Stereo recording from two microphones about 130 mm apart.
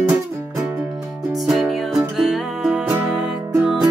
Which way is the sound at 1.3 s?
Centre (ahead or behind).